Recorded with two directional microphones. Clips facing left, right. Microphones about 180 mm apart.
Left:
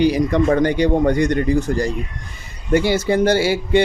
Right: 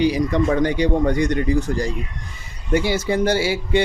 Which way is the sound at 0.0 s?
55° left (ahead or behind).